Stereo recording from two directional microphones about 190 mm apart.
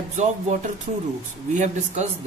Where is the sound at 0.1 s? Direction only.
35° right (ahead or behind).